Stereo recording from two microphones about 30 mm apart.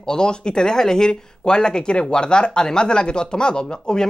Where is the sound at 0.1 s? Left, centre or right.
Left.